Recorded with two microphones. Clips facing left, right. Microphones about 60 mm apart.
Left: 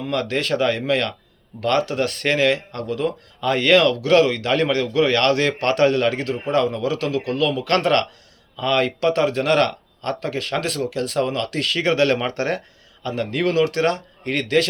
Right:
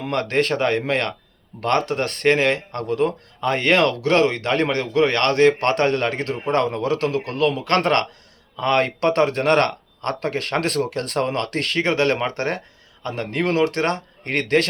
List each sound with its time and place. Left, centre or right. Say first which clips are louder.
0.0 s speech: right 2 dB; right